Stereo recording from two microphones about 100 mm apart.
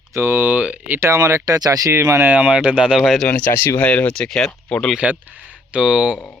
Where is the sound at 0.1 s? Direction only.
25° right (ahead or behind).